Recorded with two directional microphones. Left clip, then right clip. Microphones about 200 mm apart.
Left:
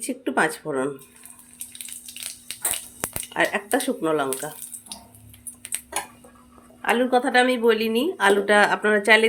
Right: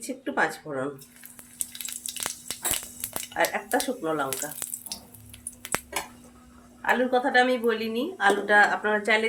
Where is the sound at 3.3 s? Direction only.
50° left (ahead or behind).